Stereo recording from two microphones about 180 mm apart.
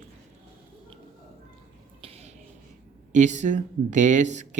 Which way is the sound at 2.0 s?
35° right (ahead or behind).